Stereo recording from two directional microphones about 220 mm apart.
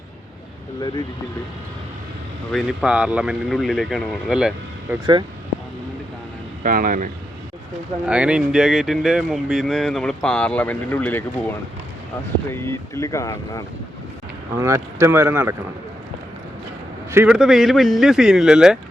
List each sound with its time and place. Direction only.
2.5 s speech: centre (ahead or behind)
6.6 s speech: 40° right (ahead or behind)
8.0 s speech: 5° right (ahead or behind); by 13.7 s 15° left (ahead or behind)
14.5 s speech: 15° right (ahead or behind)
17.1 s speech: 10° right (ahead or behind)